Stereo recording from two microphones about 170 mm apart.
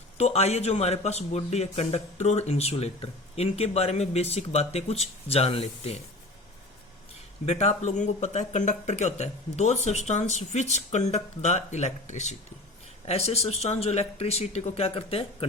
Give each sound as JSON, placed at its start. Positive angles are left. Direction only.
{"t": 0.2, "sound": "speech", "side_deg": 40}
{"t": 7.4, "sound": "speech", "side_deg": 40}